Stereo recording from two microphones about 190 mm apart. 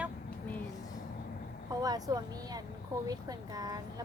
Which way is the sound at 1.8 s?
20° right (ahead or behind).